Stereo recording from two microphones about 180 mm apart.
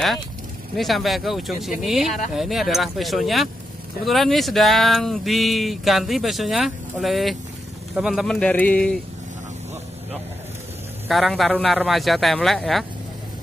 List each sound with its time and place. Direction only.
0.7 s speech: centre (ahead or behind)
11.1 s speech: centre (ahead or behind)